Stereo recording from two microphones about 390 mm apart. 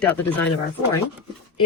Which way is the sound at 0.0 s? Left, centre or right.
Centre.